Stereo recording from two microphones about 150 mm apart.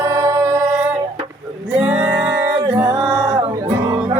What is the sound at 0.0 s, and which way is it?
Singing, 15° right (ahead or behind).